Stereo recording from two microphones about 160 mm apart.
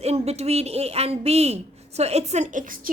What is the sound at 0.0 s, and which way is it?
A woman's voice, 40° right (ahead or behind).